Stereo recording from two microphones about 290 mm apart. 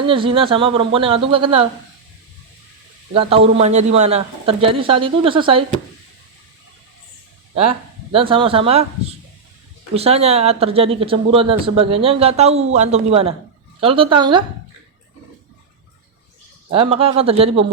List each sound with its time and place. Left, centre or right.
0.1 s speech: centre
3.1 s speech: centre
7.5 s speech: centre
16.7 s speech: centre